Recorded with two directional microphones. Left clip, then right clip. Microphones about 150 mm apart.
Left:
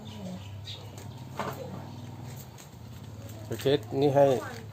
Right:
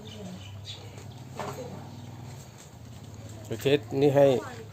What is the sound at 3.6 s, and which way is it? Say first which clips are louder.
Speech: right 2 dB; 35° right (ahead or behind).